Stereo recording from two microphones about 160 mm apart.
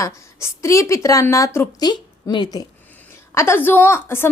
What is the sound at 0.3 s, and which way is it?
A woman's voice, 20° left (ahead or behind).